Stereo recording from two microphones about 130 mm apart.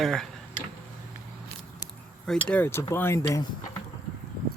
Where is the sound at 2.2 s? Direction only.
10° left (ahead or behind).